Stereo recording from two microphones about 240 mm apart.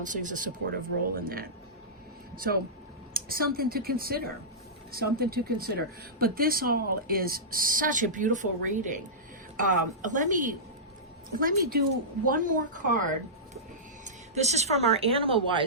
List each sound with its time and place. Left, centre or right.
0.1 s speech: right